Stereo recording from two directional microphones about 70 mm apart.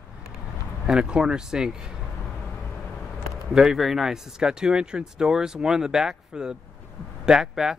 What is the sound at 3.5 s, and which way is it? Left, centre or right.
Speech, centre.